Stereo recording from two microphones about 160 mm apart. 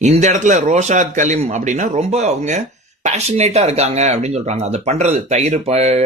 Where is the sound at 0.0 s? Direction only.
45° right (ahead or behind).